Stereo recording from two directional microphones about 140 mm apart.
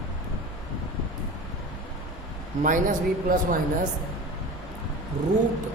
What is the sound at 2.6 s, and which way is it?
Speech, 70° right (ahead or behind).